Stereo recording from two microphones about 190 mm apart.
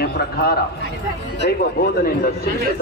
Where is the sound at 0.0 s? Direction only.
55° left (ahead or behind).